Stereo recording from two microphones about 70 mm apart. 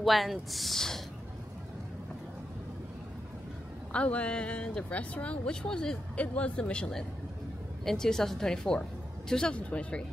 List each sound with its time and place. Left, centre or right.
0.0 s speech: centre
3.9 s speech: centre